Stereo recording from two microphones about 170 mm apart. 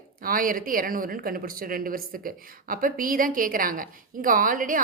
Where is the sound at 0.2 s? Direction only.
55° right (ahead or behind).